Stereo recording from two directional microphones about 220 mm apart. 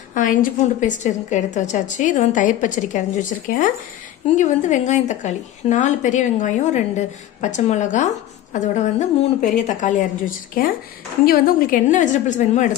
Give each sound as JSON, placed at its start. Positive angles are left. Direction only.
{"t": 0.1, "sound": "a woman's voice", "side_deg": 35}